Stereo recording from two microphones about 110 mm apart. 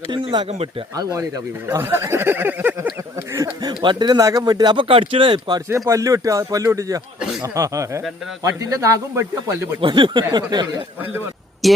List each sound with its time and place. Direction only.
0.1 s speech: 50° right (ahead or behind)
1.8 s speech: 25° right (ahead or behind)
3.3 s speech: 35° right (ahead or behind)
5.6 s speech: 25° right (ahead or behind)
9.8 s speech: 50° right (ahead or behind)
11.6 s speech: centre (ahead or behind)